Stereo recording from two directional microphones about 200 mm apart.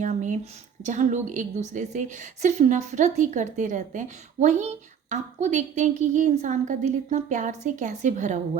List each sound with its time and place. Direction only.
0.0 s a woman's voice: 40° right (ahead or behind)